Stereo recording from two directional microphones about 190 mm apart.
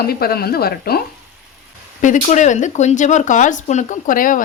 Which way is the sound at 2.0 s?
40° left (ahead or behind).